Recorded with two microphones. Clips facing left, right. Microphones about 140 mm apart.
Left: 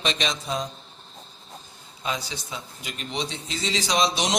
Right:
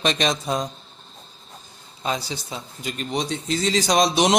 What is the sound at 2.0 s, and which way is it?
A man's voice, 40° right (ahead or behind).